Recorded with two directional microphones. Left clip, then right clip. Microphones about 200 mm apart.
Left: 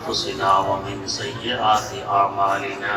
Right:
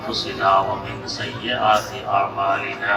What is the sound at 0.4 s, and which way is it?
Speech, 20° right (ahead or behind).